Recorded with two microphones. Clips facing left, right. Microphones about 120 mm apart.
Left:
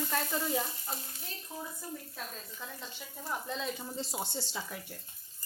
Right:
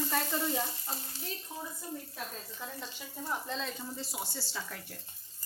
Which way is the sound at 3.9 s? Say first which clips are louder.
Left 3 dB; 25° left (ahead or behind).